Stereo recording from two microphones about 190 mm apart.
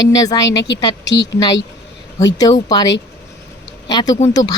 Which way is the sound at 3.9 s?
20° left (ahead or behind).